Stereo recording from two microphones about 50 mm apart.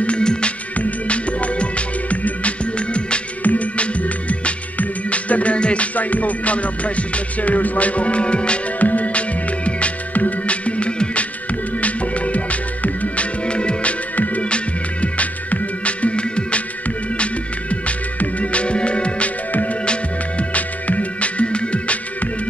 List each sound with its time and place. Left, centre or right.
0.0 s music: centre